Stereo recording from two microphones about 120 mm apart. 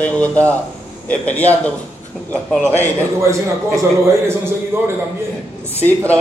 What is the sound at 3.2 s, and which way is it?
A man's voice, 25° right (ahead or behind).